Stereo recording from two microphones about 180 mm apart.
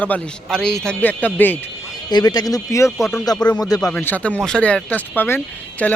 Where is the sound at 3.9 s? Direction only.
10° left (ahead or behind).